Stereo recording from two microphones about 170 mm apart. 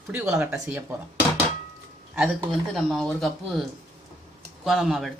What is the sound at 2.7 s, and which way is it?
Speech, 5° left (ahead or behind).